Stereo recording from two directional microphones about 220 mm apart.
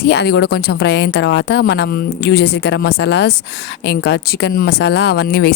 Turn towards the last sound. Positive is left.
turn(degrees=50)  # may be behind; listen again after turning